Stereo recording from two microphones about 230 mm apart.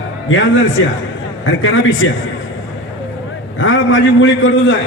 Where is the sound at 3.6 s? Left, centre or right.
Left.